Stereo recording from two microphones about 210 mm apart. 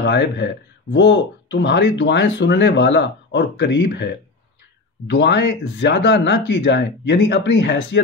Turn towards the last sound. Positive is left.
turn(degrees=55)  # may be behind; listen again after turning